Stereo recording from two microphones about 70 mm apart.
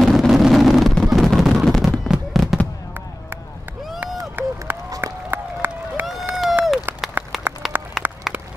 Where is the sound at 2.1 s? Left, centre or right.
Centre.